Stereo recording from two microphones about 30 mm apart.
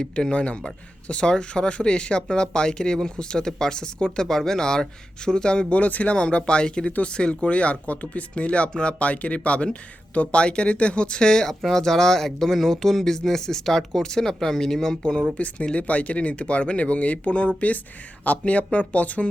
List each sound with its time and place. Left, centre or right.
0.0 s speech: left
4.3 s speech: centre; by 5.7 s left
5.7 s speech: left
6.1 s speech: left
11.6 s speech: centre
15.4 s speech: left